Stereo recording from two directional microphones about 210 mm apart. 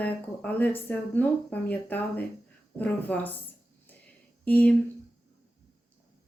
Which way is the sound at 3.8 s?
10° left (ahead or behind).